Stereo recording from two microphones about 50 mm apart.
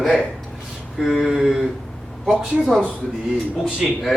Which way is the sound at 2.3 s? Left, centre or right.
Right.